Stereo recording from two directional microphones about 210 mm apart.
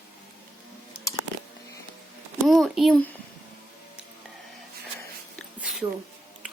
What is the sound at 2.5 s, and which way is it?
Speech, centre (ahead or behind).